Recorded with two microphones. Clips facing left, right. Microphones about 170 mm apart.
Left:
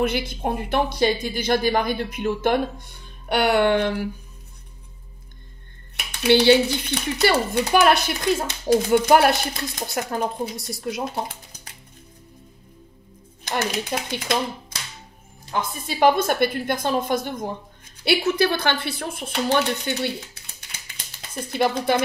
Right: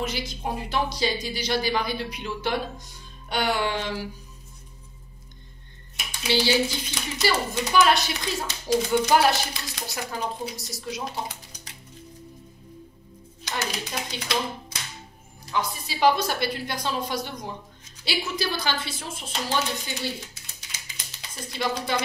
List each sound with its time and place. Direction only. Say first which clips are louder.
0.3 s speech: left 5 dB; 55° left (ahead or behind)
6.2 s speech: left 8 dB; 60° left (ahead or behind)
13.4 s speech: left 6 dB; 55° left (ahead or behind)
15.5 s speech: left 2 dB; 50° left (ahead or behind)